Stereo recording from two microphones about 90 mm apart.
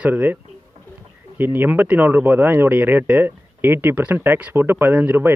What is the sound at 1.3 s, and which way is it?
Speech, 20° right (ahead or behind).